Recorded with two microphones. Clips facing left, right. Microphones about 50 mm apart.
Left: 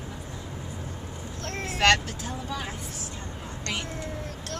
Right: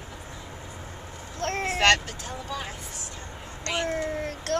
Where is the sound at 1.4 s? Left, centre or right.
Right.